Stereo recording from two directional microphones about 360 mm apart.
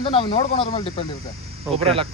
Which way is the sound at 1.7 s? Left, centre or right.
Centre.